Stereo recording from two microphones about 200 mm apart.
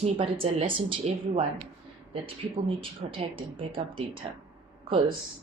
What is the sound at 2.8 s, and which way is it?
Speech, 25° right (ahead or behind).